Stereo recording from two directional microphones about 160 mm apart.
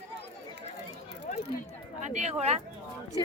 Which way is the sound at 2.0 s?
45° right (ahead or behind).